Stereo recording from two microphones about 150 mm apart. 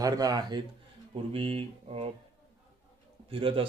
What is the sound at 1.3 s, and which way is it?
Speech, 40° right (ahead or behind).